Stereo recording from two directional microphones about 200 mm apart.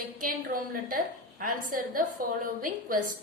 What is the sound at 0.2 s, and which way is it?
A woman's voice, 45° right (ahead or behind).